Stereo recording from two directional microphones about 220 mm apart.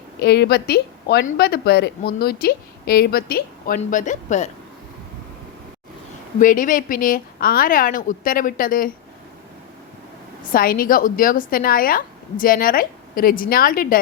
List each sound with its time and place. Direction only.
0.2 s a woman's voice: 50° left (ahead or behind)
6.4 s a woman's voice: 35° left (ahead or behind)
10.5 s a woman's voice: 40° left (ahead or behind)